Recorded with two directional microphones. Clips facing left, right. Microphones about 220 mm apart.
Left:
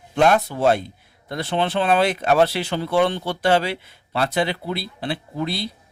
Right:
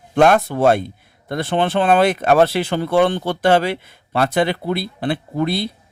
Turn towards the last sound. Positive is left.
turn(degrees=-55)  # may be behind; listen again after turning